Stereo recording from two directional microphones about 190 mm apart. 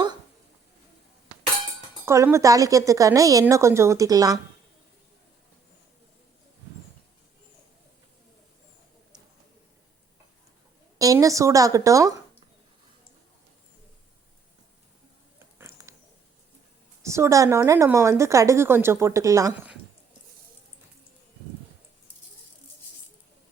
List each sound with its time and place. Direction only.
2.0 s a woman's voice: 15° right (ahead or behind)
10.9 s a woman's voice: 20° right (ahead or behind)
15.5 s a sound: 15° right (ahead or behind)
17.0 s a woman's voice: 15° right (ahead or behind)